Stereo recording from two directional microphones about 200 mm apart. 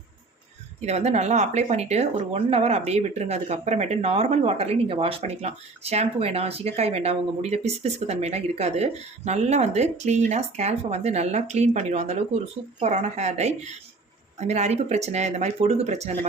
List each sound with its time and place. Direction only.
0.8 s speech: 35° right (ahead or behind)